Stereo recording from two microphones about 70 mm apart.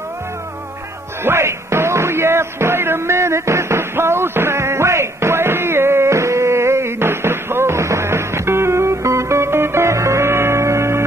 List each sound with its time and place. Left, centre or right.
1.2 s music: right